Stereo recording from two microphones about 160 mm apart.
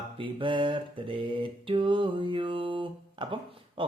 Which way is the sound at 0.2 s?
30° right (ahead or behind).